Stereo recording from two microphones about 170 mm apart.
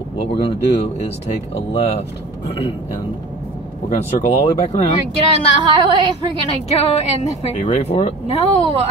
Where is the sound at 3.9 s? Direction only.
40° left (ahead or behind).